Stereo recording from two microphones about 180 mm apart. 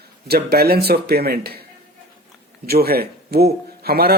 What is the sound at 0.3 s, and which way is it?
A man's voice, 60° right (ahead or behind).